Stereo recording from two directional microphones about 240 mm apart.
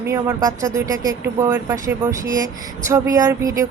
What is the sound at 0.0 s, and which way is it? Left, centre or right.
Speech, centre.